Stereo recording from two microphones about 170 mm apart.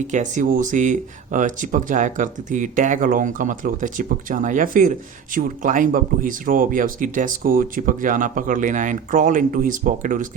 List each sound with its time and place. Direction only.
0.1 s speech: 45° right (ahead or behind)